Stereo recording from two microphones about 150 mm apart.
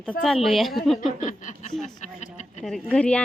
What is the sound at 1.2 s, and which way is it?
Speech, 55° left (ahead or behind).